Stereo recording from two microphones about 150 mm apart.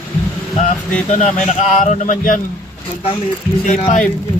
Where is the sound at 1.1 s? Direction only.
50° left (ahead or behind).